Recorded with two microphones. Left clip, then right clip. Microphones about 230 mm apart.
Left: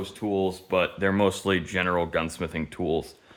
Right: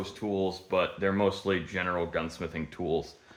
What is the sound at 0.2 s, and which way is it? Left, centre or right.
Speech, left.